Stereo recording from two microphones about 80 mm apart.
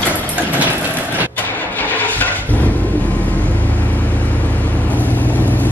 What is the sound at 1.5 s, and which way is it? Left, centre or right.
Vehicle, left.